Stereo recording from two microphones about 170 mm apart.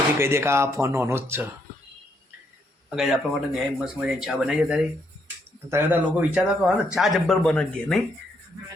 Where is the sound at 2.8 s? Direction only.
5° right (ahead or behind).